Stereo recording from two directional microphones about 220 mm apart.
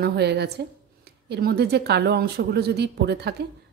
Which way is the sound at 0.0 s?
50° right (ahead or behind).